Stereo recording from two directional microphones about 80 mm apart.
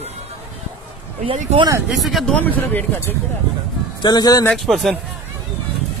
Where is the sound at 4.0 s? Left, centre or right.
Left.